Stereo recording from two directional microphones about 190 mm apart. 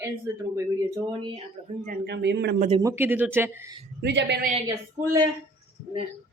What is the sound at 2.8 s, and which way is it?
Speech, 15° right (ahead or behind).